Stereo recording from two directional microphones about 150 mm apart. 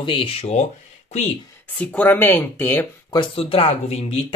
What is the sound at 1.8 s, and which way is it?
Speech, 10° left (ahead or behind).